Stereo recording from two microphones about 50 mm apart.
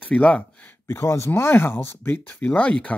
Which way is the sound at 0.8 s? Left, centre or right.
Left.